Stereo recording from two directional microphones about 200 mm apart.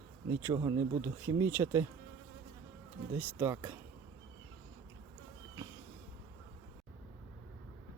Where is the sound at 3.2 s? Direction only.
10° right (ahead or behind).